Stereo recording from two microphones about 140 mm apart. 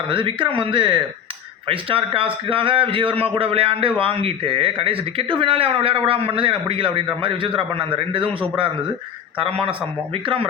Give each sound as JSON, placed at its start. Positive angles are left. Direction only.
{"t": 0.1, "sound": "a man's voice", "side_deg": -35}
{"t": 9.4, "sound": "speech", "side_deg": -40}